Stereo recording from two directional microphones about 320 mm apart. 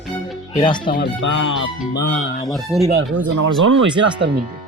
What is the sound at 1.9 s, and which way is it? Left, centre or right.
Speech, left.